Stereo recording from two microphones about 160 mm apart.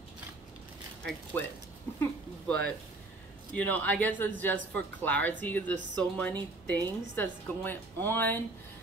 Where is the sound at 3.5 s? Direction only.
10° left (ahead or behind).